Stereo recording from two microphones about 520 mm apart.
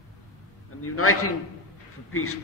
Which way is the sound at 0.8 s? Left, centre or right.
Left.